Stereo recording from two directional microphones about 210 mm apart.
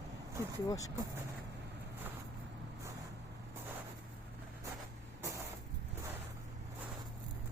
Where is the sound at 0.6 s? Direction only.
15° left (ahead or behind).